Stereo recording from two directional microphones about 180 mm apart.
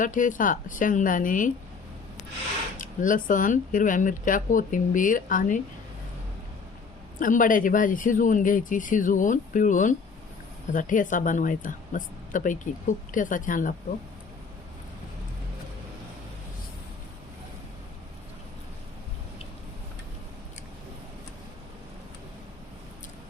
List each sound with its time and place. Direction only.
0.0 s speech: 45° left (ahead or behind)
2.7 s speech: 45° left (ahead or behind)
7.2 s speech: 50° left (ahead or behind)